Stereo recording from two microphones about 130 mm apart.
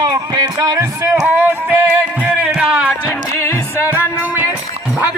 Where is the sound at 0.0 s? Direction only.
30° right (ahead or behind).